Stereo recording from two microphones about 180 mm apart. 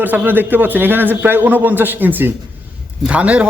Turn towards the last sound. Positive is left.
turn(degrees=-5)  # may be behind; listen again after turning